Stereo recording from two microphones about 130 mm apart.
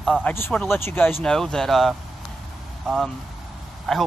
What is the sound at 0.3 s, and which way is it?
Speech, 15° left (ahead or behind).